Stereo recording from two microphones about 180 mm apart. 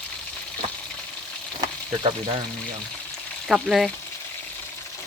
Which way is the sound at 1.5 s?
30° right (ahead or behind).